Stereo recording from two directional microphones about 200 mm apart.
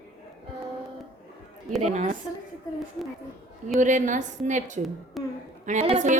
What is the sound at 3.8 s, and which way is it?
A woman's voice, 40° right (ahead or behind).